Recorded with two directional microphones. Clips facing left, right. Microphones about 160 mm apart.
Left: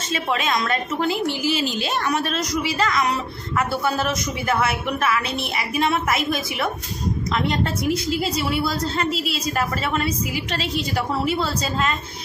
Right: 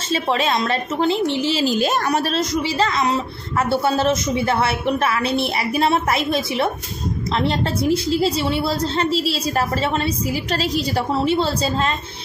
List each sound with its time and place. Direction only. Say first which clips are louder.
0.1 s a woman's voice: right 3 dB; 30° right (ahead or behind)
1.8 s a woman's voice: right 4 dB; 40° right (ahead or behind)